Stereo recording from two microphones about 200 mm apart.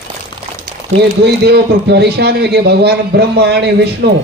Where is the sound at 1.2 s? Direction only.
55° right (ahead or behind).